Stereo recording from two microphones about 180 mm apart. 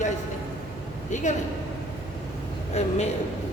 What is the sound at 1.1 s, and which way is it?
Speech, 40° left (ahead or behind).